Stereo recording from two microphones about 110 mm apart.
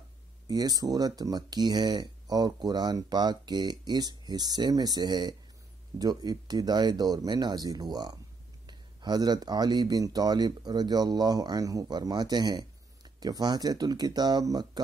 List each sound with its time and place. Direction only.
0.5 s speech: 35° right (ahead or behind)